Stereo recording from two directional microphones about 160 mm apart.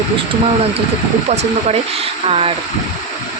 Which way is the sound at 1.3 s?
40° right (ahead or behind).